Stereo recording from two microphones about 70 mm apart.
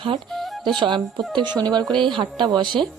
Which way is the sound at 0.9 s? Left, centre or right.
Right.